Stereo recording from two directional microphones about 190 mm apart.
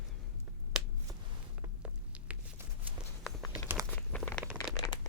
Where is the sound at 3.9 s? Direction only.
5° left (ahead or behind).